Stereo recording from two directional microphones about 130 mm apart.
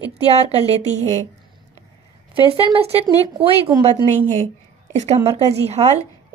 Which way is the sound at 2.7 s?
50° right (ahead or behind).